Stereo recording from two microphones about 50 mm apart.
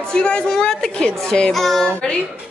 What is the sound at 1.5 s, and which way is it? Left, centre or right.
Speech, centre.